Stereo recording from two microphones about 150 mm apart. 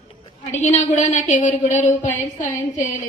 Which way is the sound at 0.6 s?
55° left (ahead or behind).